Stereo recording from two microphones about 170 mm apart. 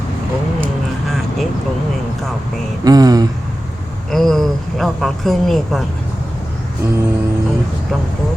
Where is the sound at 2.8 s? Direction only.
20° right (ahead or behind).